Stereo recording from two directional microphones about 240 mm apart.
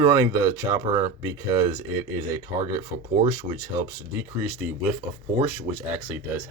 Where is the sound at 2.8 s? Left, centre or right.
Centre.